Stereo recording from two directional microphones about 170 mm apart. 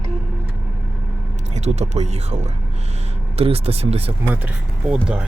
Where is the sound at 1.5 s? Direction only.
40° right (ahead or behind).